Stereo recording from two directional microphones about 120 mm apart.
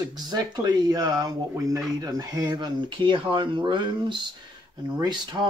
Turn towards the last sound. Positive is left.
turn(degrees=-35)  # may be behind; listen again after turning